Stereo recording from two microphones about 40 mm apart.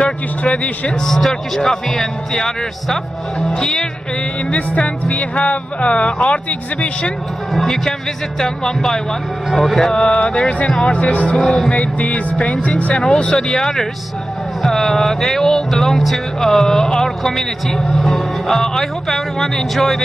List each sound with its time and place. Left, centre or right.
0.4 s speech: left
1.0 s speech: centre
4.5 s speech: left
7.5 s speech: centre
9.9 s a sound: left
10.8 s speech: left
11.3 s speech: centre
11.7 s speech: left
12.9 s speech: left